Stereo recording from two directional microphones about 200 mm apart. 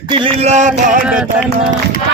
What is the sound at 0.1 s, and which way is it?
Music, 30° right (ahead or behind).